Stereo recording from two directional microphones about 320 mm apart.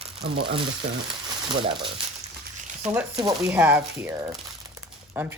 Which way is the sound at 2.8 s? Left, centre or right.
Centre.